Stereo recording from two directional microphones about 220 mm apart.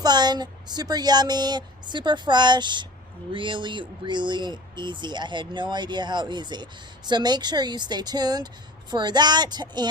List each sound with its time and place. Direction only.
0.0 s speech: 20° right (ahead or behind)